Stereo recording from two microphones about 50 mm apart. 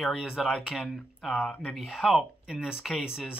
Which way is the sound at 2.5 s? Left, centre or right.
Centre.